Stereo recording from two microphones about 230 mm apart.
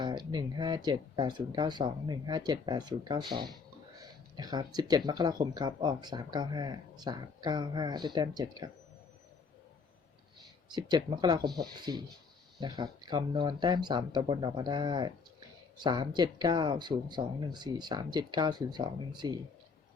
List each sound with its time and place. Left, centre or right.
0.0 s speech: centre
10.7 s speech: centre